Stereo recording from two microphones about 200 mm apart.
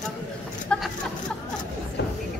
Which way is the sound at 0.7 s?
5° left (ahead or behind).